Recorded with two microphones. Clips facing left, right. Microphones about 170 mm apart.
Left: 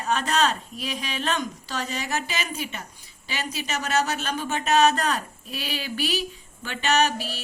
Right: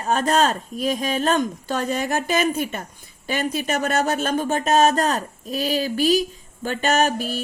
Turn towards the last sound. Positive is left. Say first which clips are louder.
# right 3 dB
turn(degrees=-50)  # may be behind; listen again after turning